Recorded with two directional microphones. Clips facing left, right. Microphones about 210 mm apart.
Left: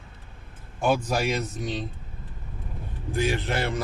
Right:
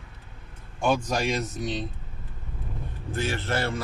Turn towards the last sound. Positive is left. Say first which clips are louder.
# left 1 dB
turn(degrees=15)  # may be behind; listen again after turning